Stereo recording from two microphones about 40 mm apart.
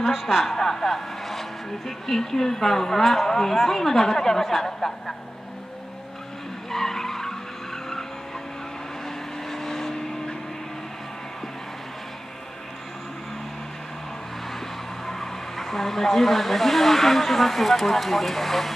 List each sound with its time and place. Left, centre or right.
0.0 s speech: centre
6.7 s skidding: centre
9.0 s vehicle: centre
15.0 s speech: centre